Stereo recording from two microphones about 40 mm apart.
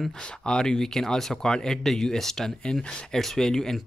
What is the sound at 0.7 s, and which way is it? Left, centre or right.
Speech, centre.